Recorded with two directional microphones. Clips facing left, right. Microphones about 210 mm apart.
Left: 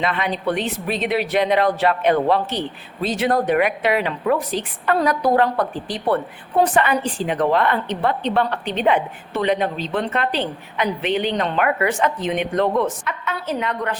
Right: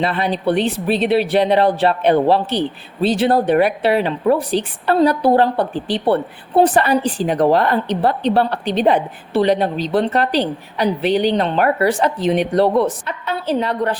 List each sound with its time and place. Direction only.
0.0 s a woman's voice: 35° right (ahead or behind)